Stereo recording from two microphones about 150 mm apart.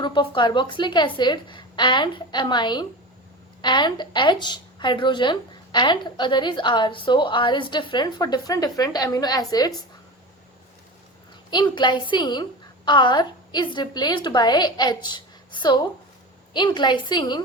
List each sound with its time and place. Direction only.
0.0 s a woman's voice: 35° left (ahead or behind)
11.5 s a woman's voice: 30° left (ahead or behind)